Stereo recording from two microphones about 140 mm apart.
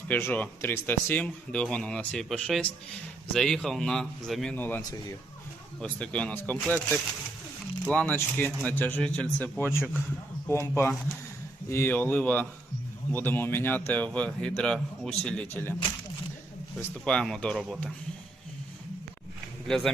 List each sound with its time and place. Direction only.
0.1 s a man's voice: 15° left (ahead or behind)
4.5 s speech: 15° left (ahead or behind)
5.8 s speech: 10° left (ahead or behind)
7.9 s speech: 10° left (ahead or behind)
16.7 s a man's voice: 5° left (ahead or behind)
19.6 s a man's voice: 5° left (ahead or behind)